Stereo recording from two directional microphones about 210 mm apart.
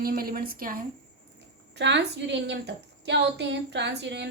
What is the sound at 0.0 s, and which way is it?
Speech, 45° right (ahead or behind).